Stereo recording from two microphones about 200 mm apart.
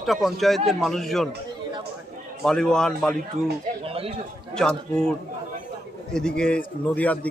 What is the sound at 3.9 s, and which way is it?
Speech, 30° right (ahead or behind).